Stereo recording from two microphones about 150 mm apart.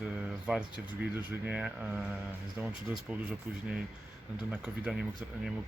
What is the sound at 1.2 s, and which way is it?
Speech, 10° right (ahead or behind).